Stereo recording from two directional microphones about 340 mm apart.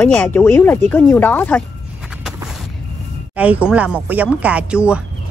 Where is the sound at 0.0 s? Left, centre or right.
Centre.